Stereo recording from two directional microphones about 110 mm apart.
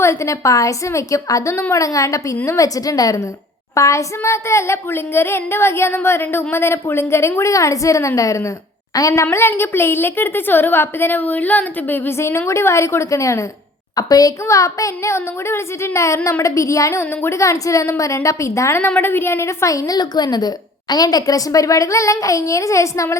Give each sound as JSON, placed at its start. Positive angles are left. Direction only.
{"t": 0.0, "sound": "a woman's voice", "side_deg": 25}